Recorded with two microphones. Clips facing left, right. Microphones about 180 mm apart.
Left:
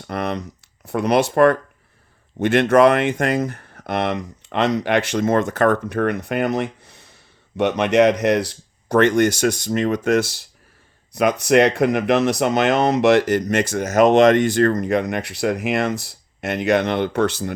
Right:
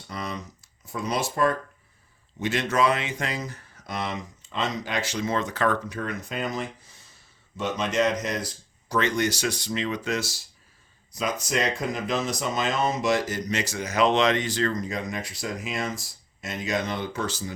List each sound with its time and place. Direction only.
0.1 s speech: 65° left (ahead or behind)